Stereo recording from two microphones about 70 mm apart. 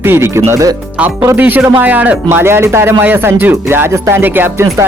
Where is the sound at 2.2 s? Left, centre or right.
Right.